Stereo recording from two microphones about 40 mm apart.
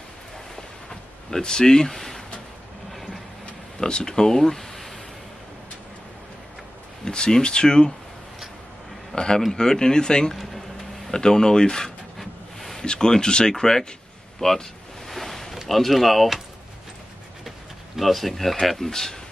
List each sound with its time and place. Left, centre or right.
0.6 s a sound: centre
1.4 s speech: centre
2.9 s vehicle: centre
3.8 s speech: centre
7.1 s speech: centre
9.1 s a man's voice: centre
10.3 s a sound: centre
11.1 s speech: centre
12.2 s boat: centre
12.8 s speech: centre
14.4 s a sound: centre
15.7 s speech: centre
17.9 s speech: centre